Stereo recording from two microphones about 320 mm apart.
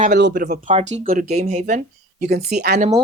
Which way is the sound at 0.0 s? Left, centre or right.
Right.